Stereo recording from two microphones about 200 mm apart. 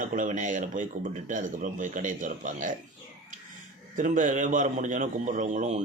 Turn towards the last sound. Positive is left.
turn(degrees=-35)  # may be behind; listen again after turning